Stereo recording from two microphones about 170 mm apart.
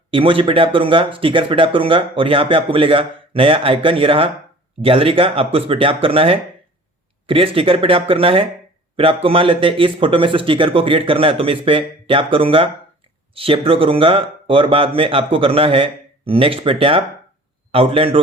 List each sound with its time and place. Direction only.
0.1 s a man's voice: 30° right (ahead or behind)